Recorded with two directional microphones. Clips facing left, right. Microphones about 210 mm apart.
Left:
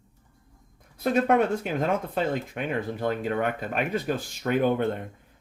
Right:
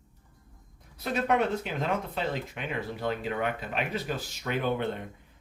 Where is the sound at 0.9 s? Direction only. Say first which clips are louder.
Left 5 dB; 50° left (ahead or behind).